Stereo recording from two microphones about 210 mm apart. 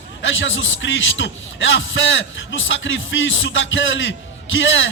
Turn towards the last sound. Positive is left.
turn(degrees=65)  # may be behind; listen again after turning